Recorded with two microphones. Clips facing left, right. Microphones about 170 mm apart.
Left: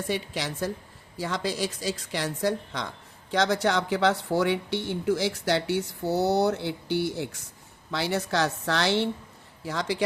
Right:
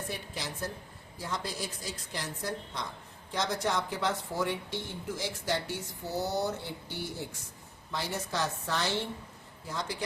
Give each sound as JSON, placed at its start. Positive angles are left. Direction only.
{"t": 0.1, "sound": "a woman's voice", "side_deg": 90}
{"t": 9.6, "sound": "a woman's voice", "side_deg": 90}